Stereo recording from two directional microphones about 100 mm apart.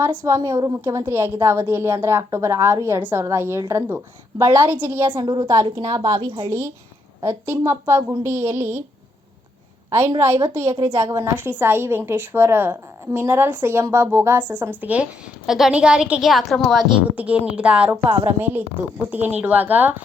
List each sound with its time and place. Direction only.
0.0 s a woman's voice: 20° right (ahead or behind)
0.3 s a woman's voice: 30° right (ahead or behind)
5.1 s a woman's voice: 45° right (ahead or behind)
5.5 s a woman's voice: 35° right (ahead or behind)
7.2 s a woman's voice: 25° right (ahead or behind)
10.2 s a woman's voice: 25° right (ahead or behind)
15.4 s a woman's voice: 5° right (ahead or behind)
17.2 s a woman's voice: 15° right (ahead or behind)